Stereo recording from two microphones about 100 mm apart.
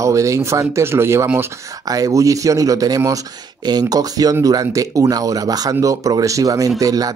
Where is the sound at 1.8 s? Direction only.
35° right (ahead or behind).